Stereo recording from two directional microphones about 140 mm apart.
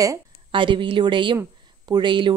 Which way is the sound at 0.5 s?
35° right (ahead or behind).